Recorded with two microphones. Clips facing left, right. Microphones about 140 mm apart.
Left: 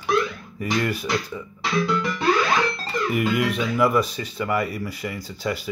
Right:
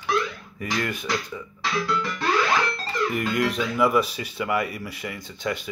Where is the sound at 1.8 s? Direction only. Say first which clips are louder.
Left 4 dB; 20° left (ahead or behind).